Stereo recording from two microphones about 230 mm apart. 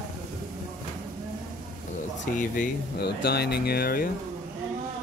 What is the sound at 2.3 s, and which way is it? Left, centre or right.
Speech, left.